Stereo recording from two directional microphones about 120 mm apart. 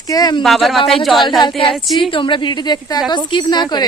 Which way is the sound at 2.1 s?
45° left (ahead or behind).